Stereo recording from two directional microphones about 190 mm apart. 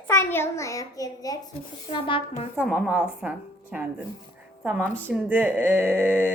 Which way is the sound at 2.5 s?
Centre (ahead or behind).